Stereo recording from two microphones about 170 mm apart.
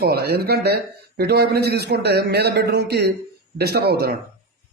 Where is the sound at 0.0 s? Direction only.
65° right (ahead or behind).